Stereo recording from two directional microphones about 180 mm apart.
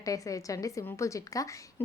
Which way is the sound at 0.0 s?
20° left (ahead or behind).